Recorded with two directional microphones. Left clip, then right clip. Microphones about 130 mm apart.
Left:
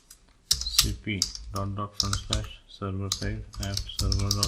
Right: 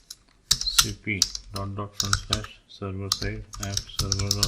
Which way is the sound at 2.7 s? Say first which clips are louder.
Right 3 dB; 20° left (ahead or behind).